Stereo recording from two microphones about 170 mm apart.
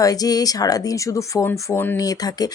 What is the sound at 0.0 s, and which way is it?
Speech, 20° left (ahead or behind).